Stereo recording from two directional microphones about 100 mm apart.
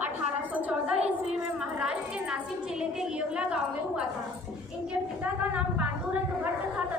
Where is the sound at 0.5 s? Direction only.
15° right (ahead or behind).